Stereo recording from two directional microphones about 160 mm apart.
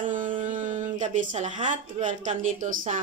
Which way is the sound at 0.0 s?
55° right (ahead or behind).